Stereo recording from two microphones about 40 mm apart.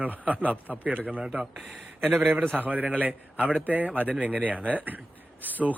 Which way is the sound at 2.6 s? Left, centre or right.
Right.